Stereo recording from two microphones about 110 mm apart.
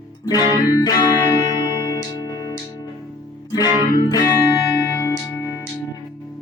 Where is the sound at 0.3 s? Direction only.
35° left (ahead or behind).